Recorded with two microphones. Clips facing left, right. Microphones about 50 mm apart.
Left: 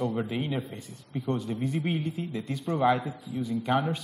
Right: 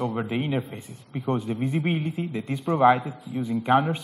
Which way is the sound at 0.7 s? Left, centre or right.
Right.